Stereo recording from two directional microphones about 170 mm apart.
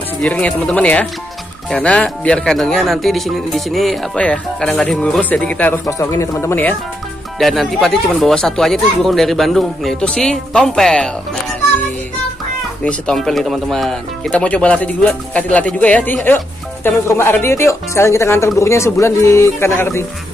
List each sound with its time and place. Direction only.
0.2 s speech: 10° left (ahead or behind)
12.8 s speech: 5° left (ahead or behind)